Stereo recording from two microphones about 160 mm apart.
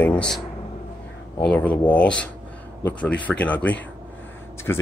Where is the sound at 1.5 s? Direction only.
10° left (ahead or behind).